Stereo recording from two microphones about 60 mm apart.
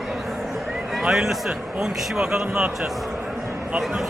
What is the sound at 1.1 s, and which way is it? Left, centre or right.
A man's voice, centre.